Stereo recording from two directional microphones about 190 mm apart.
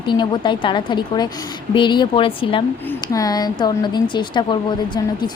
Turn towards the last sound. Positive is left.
turn(degrees=25)  # may be behind; listen again after turning